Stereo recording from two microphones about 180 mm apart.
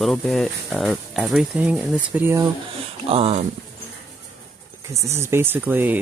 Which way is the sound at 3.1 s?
35° right (ahead or behind).